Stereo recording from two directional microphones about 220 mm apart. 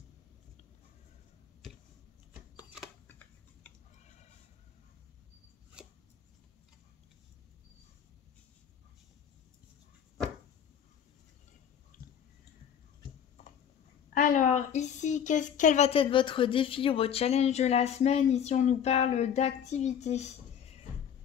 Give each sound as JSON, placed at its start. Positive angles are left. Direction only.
{"t": 2.5, "sound": "shuffling cards", "side_deg": -5}
{"t": 3.1, "sound": "typing", "side_deg": 5}
{"t": 4.0, "sound": "fowl", "side_deg": 30}
{"t": 11.9, "sound": "a sound", "side_deg": 40}
{"t": 14.1, "sound": "a woman's voice", "side_deg": 35}